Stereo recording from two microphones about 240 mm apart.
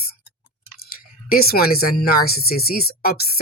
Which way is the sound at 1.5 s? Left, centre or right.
Left.